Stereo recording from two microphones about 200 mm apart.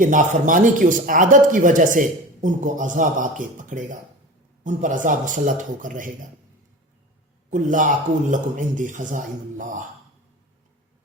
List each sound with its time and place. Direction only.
0.0 s speech: 40° right (ahead or behind)
7.5 s speech: 40° right (ahead or behind)